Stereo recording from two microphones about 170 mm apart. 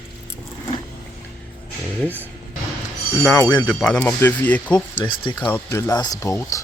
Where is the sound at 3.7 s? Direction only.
5° left (ahead or behind).